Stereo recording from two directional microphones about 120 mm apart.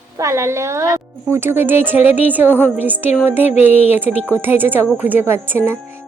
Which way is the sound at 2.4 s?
15° left (ahead or behind).